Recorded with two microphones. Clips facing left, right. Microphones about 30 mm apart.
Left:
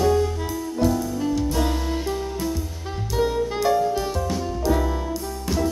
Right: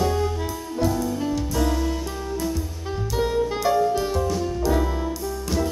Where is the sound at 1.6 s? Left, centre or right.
Left.